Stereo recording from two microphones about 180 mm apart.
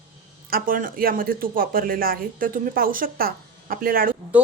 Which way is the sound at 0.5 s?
50° right (ahead or behind).